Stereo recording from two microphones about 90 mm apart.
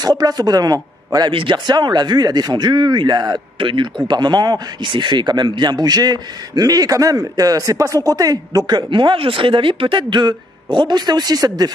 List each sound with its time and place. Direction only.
0.0 s speech: 45° right (ahead or behind)
1.3 s speech: 70° right (ahead or behind); by 3.3 s 50° right (ahead or behind)
3.5 s speech: 65° right (ahead or behind); by 11.7 s 45° right (ahead or behind)